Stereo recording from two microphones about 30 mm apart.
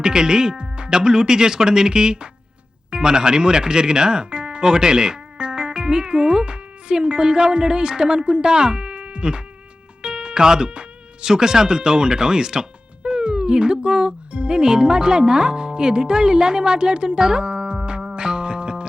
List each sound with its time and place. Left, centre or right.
0.0 s speech: right
10.0 s music: right
11.2 s speech: right
13.0 s speech: right